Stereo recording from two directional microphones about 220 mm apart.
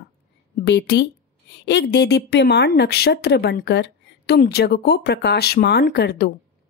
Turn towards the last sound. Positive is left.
turn(degrees=45)  # may be behind; listen again after turning